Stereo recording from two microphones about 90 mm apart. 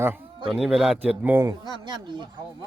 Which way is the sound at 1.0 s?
20° right (ahead or behind).